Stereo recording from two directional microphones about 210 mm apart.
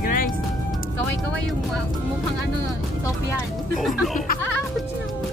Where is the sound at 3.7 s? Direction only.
Centre (ahead or behind).